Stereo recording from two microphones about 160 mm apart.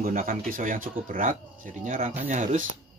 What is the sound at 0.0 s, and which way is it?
Speech, 60° right (ahead or behind).